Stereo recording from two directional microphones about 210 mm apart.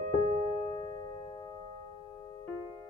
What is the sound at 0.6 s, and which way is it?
Music, 20° left (ahead or behind).